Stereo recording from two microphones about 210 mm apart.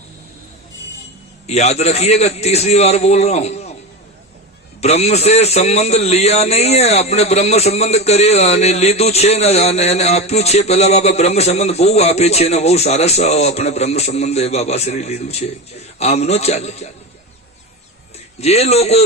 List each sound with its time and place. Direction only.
1.5 s a man's voice: 30° left (ahead or behind)
4.8 s a man's voice: 30° left (ahead or behind)
18.3 s a man's voice: 30° left (ahead or behind)